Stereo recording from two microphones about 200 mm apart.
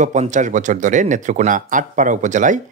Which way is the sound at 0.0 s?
35° right (ahead or behind).